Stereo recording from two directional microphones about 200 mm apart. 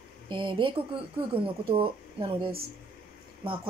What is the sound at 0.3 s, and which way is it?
A woman's voice, 25° right (ahead or behind).